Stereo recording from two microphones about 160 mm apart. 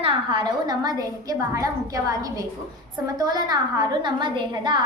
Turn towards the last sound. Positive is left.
turn(degrees=-30)  # may be behind; listen again after turning